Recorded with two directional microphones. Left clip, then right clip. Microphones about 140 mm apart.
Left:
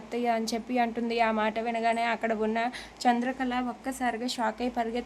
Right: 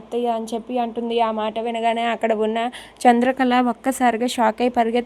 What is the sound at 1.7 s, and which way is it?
A woman's voice, 30° right (ahead or behind).